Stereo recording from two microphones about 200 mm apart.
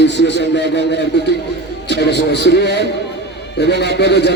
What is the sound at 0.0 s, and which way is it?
Speech, 60° left (ahead or behind).